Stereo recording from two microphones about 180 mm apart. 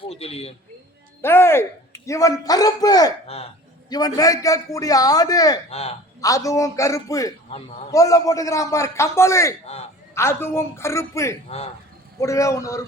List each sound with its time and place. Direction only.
0.0 s a man's voice: 35° left (ahead or behind)
1.2 s a man's voice: 15° left (ahead or behind)
3.2 s a man's voice: 35° left (ahead or behind)
3.8 s a man's voice: 20° left (ahead or behind)
11.4 s a man's voice: 35° left (ahead or behind)
12.2 s a man's voice: 15° left (ahead or behind)